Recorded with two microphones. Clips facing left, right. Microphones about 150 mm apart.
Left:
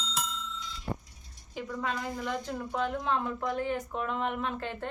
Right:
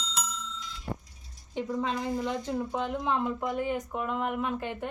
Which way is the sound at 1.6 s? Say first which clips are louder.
Right 3 dB; 20° right (ahead or behind).